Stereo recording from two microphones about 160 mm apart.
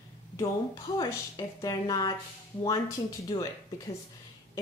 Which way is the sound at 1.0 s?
20° left (ahead or behind).